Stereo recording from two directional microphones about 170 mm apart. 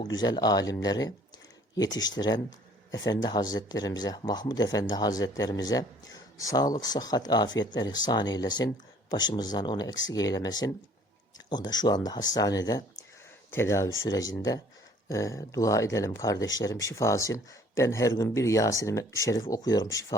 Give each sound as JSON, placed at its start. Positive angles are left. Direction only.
{"t": 0.0, "sound": "speech", "side_deg": 25}